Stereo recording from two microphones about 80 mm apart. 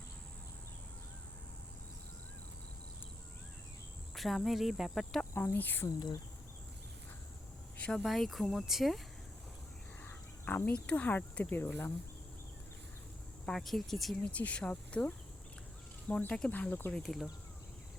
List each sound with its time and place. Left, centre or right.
4.1 s speech: centre
5.3 s cricket: left
7.8 s speech: centre
8.0 s speech: centre
10.0 s a sound: left
11.2 s speech: centre
11.5 s cricket: left
13.4 s speech: centre
14.3 s speech: centre
16.5 s cricket: left
16.9 s speech: centre